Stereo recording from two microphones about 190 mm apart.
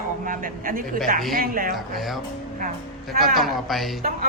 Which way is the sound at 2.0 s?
Centre (ahead or behind).